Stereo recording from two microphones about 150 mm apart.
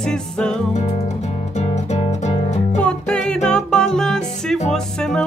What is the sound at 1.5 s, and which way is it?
Music, 45° left (ahead or behind).